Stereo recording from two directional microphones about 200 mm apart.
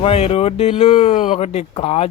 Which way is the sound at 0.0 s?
30° left (ahead or behind).